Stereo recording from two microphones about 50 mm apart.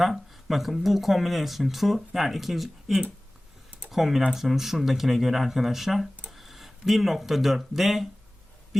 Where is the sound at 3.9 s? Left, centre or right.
Centre.